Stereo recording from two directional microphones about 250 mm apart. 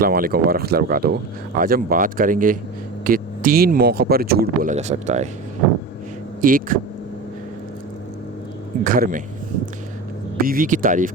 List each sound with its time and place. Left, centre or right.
0.0 s speech: right
6.4 s speech: right
8.8 s speech: right
10.3 s speech: right